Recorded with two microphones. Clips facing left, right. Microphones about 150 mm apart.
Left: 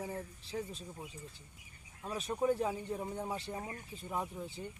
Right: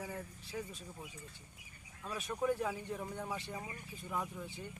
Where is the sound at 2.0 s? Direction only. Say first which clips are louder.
Left 3 dB; 30° left (ahead or behind).